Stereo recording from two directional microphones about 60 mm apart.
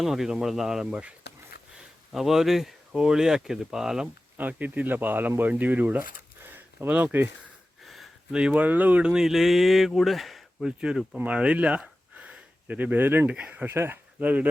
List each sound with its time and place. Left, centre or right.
0.0 s speech: centre
2.1 s speech: centre
4.4 s speech: right
6.4 s a sound: right
7.9 s a sound: centre
8.3 s speech: centre
9.1 s speech: centre
10.7 s speech: centre; by 13.2 s right
13.2 s speech: right
13.7 s speech: right
14.2 s speech: right